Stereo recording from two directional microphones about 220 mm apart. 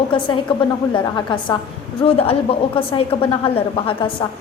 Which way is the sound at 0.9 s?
20° left (ahead or behind).